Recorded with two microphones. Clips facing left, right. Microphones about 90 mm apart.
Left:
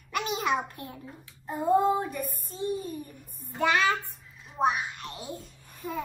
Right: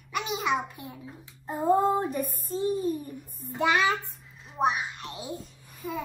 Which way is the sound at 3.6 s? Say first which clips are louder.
Even; 20° right (ahead or behind).